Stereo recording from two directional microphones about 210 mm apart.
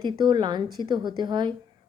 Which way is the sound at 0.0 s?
20° right (ahead or behind).